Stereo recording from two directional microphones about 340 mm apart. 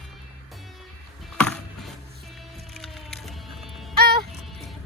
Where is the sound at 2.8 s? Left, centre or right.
Centre.